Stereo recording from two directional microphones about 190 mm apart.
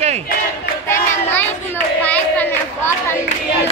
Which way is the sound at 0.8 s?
10° left (ahead or behind).